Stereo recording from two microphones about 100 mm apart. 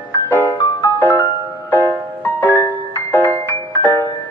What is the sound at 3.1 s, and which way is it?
Music, 20° left (ahead or behind).